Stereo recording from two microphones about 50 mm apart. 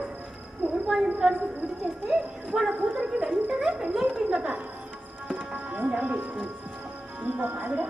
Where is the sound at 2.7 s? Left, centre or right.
Right.